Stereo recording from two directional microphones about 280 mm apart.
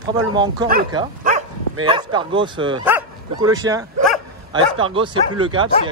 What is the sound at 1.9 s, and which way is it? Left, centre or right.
Speech, centre.